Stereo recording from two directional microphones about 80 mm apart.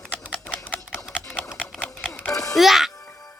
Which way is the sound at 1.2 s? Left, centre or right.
Centre.